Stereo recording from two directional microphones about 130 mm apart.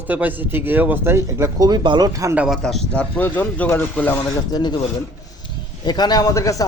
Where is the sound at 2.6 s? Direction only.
5° left (ahead or behind).